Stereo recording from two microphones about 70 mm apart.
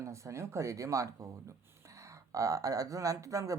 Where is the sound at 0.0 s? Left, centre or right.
Right.